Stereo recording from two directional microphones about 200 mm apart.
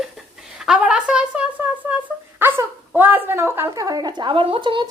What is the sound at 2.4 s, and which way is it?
A woman's voice, 10° right (ahead or behind).